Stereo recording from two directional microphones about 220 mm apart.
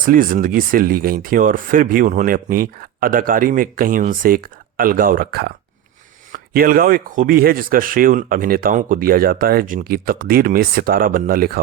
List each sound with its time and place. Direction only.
0.0 s speech: 40° right (ahead or behind)